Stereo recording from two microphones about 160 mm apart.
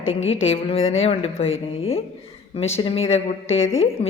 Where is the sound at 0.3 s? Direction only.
40° left (ahead or behind).